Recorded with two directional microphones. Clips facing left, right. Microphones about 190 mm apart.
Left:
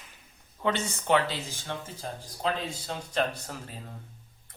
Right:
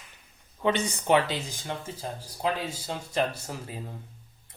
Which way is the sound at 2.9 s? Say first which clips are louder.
Right 1 dB; 10° right (ahead or behind).